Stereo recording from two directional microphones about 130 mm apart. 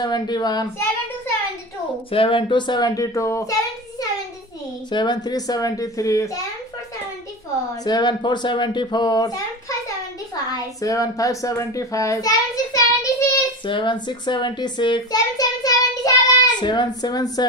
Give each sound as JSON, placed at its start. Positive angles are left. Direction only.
{"t": 0.0, "sound": "speech", "side_deg": 35}
{"t": 2.0, "sound": "speech", "side_deg": 45}
{"t": 4.9, "sound": "a child's voice", "side_deg": 35}
{"t": 7.8, "sound": "speech", "side_deg": 35}
{"t": 10.5, "sound": "a child's voice", "side_deg": 25}